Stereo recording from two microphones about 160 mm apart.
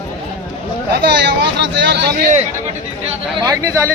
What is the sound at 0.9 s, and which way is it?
Speech, 90° right.